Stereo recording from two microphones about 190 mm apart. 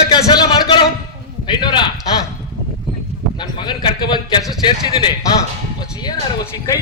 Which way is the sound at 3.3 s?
25° left (ahead or behind).